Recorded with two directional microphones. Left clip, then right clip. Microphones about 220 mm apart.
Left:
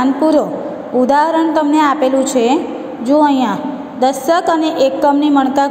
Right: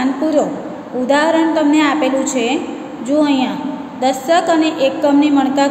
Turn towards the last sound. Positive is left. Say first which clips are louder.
# left 1 dB
turn(degrees=30)  # may be behind; listen again after turning